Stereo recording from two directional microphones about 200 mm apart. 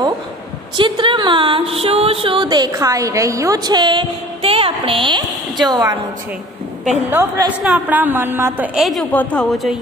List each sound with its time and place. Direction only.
0.7 s speech: 25° right (ahead or behind)
7.1 s a woman's voice: 10° right (ahead or behind)